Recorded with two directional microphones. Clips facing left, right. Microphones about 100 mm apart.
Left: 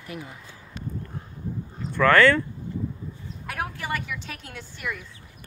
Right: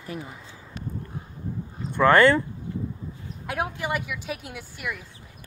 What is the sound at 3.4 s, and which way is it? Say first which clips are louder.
Speech: right 3 dB; 15° right (ahead or behind).